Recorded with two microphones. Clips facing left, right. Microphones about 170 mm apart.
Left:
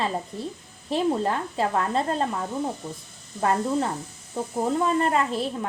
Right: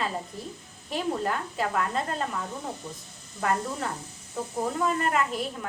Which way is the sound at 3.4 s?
30° left (ahead or behind).